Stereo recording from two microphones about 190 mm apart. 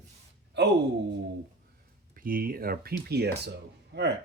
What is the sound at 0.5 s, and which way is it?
Speech, 65° right (ahead or behind).